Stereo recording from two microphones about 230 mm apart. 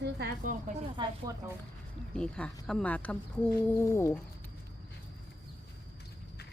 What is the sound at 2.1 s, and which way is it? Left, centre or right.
Speech, centre.